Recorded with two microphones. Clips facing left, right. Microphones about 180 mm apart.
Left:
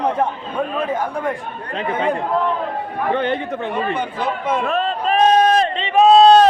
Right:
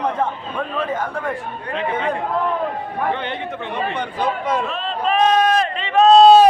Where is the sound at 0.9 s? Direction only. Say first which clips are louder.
Left 2 dB; 15° left (ahead or behind).